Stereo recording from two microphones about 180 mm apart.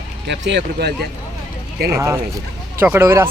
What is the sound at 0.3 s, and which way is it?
Speech, 75° right (ahead or behind).